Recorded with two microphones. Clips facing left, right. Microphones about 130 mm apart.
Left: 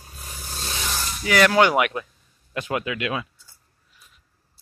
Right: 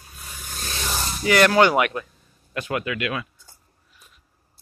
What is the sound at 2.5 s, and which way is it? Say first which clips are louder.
Speech: even; 20° left (ahead or behind).